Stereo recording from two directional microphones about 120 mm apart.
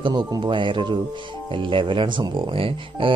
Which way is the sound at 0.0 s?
35° right (ahead or behind).